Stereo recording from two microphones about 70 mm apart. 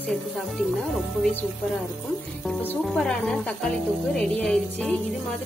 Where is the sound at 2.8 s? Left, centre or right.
Centre.